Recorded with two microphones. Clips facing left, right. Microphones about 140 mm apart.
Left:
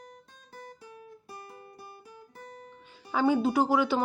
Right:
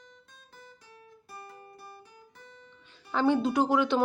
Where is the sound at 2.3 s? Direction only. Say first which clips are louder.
Left 9 dB; 45° left (ahead or behind).